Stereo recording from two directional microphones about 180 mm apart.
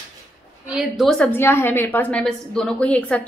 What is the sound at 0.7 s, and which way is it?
A woman's voice, centre (ahead or behind).